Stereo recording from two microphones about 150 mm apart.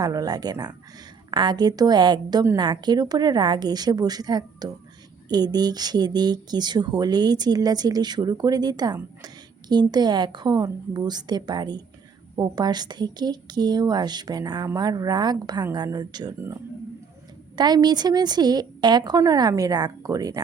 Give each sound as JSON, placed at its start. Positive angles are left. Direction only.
{"t": 0.0, "sound": "speech", "side_deg": -25}
{"t": 16.4, "sound": "speech", "side_deg": -15}
{"t": 17.6, "sound": "speech", "side_deg": -25}